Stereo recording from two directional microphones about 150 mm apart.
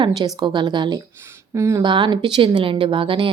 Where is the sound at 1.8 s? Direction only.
30° right (ahead or behind).